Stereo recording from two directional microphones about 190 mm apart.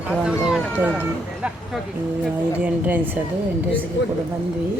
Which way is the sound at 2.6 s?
10° right (ahead or behind).